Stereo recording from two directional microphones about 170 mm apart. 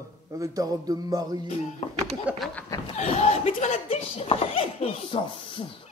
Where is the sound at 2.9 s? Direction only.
35° left (ahead or behind).